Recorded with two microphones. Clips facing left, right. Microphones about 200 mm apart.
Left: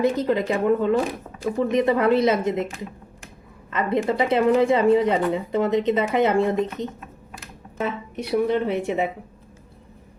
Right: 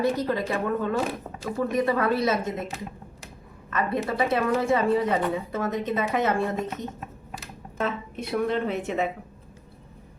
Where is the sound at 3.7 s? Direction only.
20° left (ahead or behind).